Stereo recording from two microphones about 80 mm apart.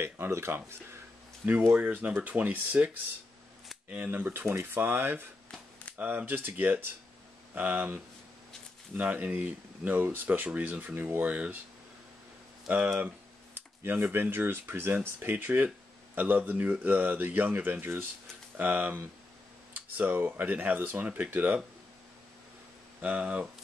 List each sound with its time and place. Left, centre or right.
0.0 s speech: right
1.8 s speech: centre
3.9 s speech: right
12.6 s speech: centre
13.8 s speech: right
23.0 s speech: centre